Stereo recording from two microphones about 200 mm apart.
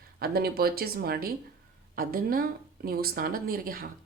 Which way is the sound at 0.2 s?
50° right (ahead or behind).